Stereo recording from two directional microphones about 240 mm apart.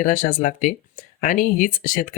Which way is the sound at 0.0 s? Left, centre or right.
Left.